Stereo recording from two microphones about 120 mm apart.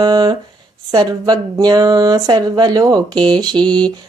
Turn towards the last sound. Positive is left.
turn(degrees=-35)  # may be behind; listen again after turning